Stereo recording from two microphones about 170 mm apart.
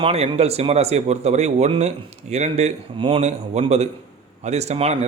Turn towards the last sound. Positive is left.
turn(degrees=-40)  # may be behind; listen again after turning